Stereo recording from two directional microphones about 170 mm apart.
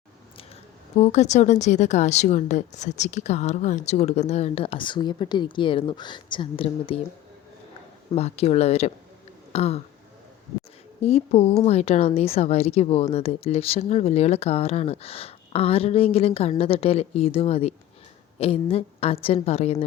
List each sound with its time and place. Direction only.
0.9 s speech: 40° left (ahead or behind)
8.1 s speech: 40° left (ahead or behind)
11.0 s speech: 35° left (ahead or behind)